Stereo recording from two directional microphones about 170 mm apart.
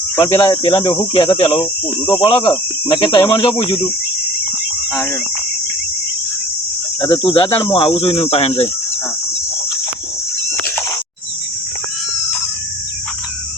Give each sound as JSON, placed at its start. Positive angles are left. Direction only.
{"t": 0.2, "sound": "cricket", "side_deg": 20}
{"t": 0.6, "sound": "speech", "side_deg": 30}
{"t": 2.2, "sound": "cricket", "side_deg": 30}
{"t": 7.0, "sound": "speech", "side_deg": 30}